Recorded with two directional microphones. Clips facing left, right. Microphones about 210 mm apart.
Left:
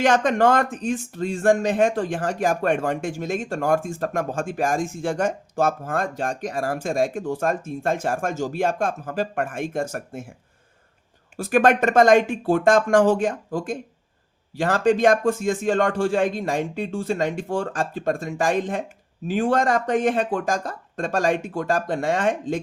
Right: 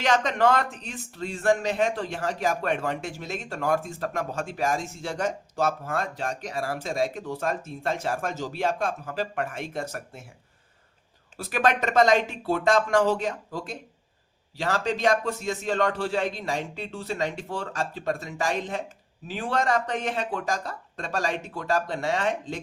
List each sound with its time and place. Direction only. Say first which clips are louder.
0.0 s speech: left 5 dB; 50° left (ahead or behind)
11.3 s speech: left 7 dB; 50° left (ahead or behind)